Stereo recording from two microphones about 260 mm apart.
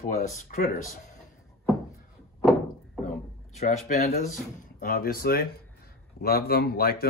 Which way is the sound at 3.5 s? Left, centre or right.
Left.